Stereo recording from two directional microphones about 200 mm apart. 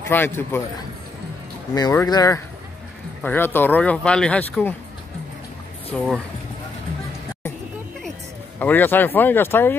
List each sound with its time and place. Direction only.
0.1 s speech: 10° left (ahead or behind)
1.7 s speech: 20° left (ahead or behind)
5.9 s speech: 5° left (ahead or behind)
8.5 s speech: 10° left (ahead or behind)